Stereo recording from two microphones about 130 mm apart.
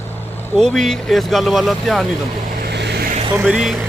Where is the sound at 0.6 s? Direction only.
5° left (ahead or behind).